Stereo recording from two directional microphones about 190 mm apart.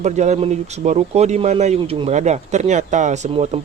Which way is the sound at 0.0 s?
35° right (ahead or behind).